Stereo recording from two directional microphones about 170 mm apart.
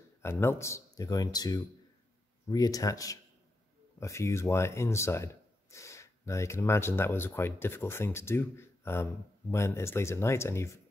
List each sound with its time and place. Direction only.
0.2 s speech: 15° left (ahead or behind)